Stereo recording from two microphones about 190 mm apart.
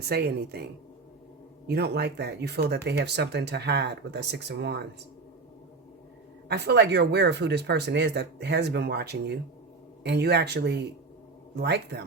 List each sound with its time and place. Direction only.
0.0 s speech: 55° right (ahead or behind)
6.5 s speech: 60° right (ahead or behind)